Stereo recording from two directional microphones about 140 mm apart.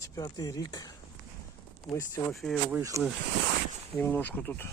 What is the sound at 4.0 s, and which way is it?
Speech, 10° left (ahead or behind).